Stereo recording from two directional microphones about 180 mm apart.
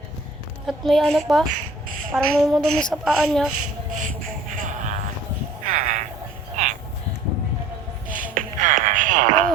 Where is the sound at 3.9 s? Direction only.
45° right (ahead or behind).